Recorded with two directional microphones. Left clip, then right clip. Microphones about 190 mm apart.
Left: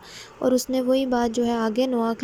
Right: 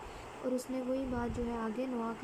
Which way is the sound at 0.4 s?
40° left (ahead or behind).